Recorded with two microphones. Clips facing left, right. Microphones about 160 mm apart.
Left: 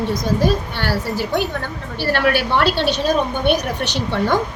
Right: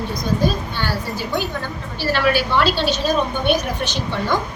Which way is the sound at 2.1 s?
60° left (ahead or behind).